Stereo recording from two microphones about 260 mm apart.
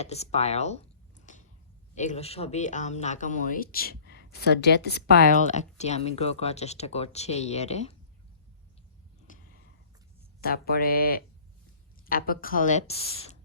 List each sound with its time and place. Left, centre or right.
0.0 s computer keyboard: left
2.0 s speech: left
5.5 s speech: left
9.3 s a sound: left
10.4 s a woman's voice: left